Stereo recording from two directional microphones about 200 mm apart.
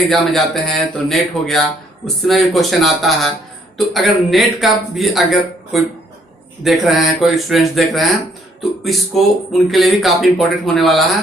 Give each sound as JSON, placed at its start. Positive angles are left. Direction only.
{"t": 0.1, "sound": "speech", "side_deg": 0}